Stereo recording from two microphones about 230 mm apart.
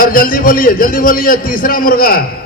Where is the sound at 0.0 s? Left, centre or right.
Left.